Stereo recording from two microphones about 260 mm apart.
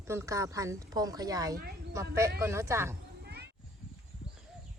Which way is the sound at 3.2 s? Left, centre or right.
Right.